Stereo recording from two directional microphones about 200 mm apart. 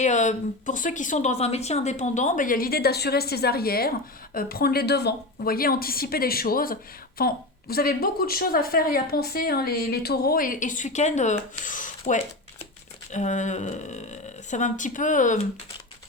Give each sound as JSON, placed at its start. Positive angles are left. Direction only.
{"t": 0.0, "sound": "a woman's voice", "side_deg": 35}